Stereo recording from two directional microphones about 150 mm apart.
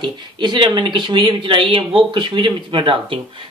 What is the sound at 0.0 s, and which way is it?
Speech, 30° right (ahead or behind).